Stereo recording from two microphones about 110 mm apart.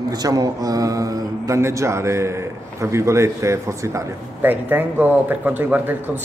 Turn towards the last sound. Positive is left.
turn(degrees=-15)  # may be behind; listen again after turning